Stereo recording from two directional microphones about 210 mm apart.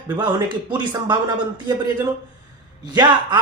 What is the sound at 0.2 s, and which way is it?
Speech, 20° right (ahead or behind).